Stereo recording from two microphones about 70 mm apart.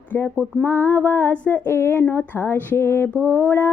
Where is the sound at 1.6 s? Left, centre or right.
Left.